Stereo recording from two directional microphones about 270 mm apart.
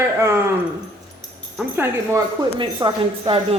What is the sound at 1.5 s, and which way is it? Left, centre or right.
A woman's voice, centre.